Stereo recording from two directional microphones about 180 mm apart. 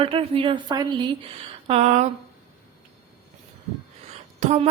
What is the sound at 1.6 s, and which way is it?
Speech, 35° right (ahead or behind).